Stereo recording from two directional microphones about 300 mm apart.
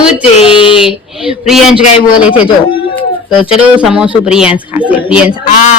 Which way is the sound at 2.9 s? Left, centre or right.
Centre.